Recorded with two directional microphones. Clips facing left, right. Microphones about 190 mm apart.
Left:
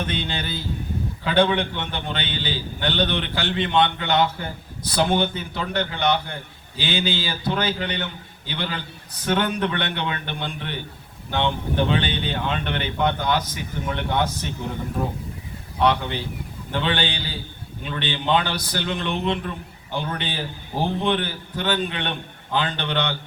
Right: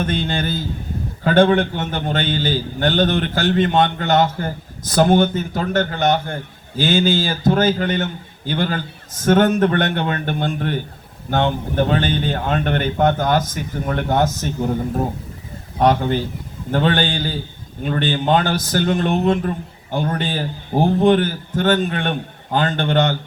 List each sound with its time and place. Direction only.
0.0 s a man's voice: 45° right (ahead or behind)